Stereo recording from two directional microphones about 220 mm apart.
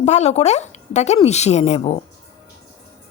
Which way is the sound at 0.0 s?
30° left (ahead or behind).